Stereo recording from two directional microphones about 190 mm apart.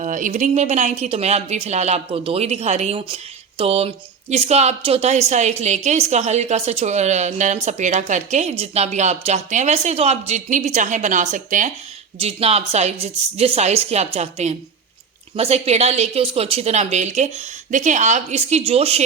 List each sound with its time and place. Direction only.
0.0 s a woman's voice: 40° right (ahead or behind)
12.2 s a woman's voice: 30° right (ahead or behind)